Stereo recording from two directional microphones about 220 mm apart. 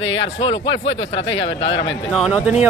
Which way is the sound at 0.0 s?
60° left (ahead or behind).